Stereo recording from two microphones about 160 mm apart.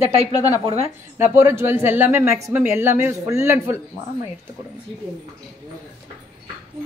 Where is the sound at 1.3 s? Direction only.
15° right (ahead or behind).